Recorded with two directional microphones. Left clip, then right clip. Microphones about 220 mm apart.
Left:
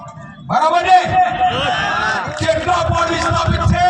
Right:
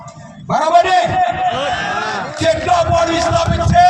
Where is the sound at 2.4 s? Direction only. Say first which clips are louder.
Right 3 dB; 40° left (ahead or behind).